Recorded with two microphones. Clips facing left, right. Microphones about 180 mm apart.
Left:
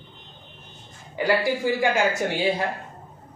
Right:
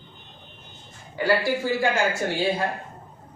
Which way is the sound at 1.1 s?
15° left (ahead or behind).